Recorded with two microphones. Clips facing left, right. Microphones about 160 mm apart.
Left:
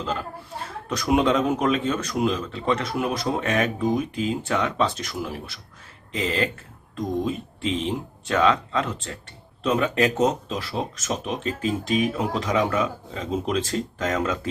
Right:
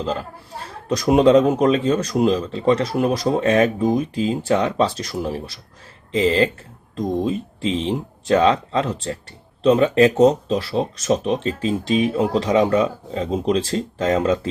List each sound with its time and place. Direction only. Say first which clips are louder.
0.9 s speech: right 7 dB; 35° right (ahead or behind)